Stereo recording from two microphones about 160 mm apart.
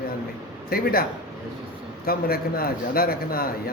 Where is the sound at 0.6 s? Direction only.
70° left (ahead or behind).